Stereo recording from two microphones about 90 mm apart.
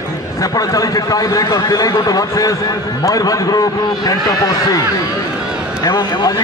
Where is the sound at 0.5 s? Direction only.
40° left (ahead or behind).